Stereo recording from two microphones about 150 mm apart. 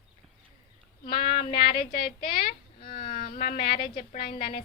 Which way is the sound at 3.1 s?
75° left (ahead or behind).